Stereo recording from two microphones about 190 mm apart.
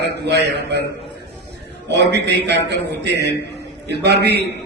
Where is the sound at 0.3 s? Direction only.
60° right (ahead or behind).